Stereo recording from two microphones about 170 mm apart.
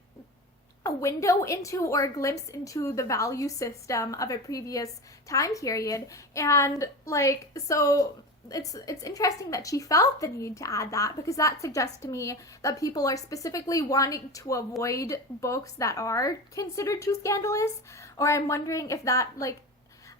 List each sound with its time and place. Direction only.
0.8 s a woman's voice: 20° left (ahead or behind)